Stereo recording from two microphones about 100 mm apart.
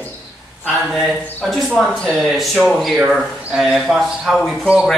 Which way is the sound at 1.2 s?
15° left (ahead or behind).